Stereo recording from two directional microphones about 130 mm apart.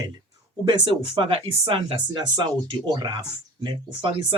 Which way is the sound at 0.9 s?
40° right (ahead or behind).